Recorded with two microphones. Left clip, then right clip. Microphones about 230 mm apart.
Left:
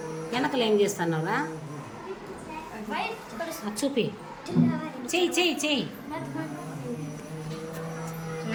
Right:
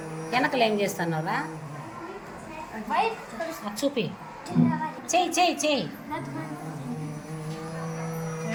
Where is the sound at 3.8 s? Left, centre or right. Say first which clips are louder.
Right 2 dB; left.